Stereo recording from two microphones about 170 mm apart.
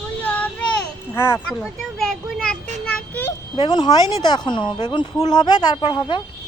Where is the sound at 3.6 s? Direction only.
25° left (ahead or behind).